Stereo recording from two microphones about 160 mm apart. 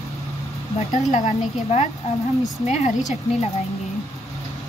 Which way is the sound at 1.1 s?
45° left (ahead or behind).